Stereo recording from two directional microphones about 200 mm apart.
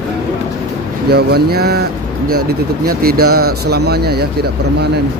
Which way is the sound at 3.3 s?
90° right.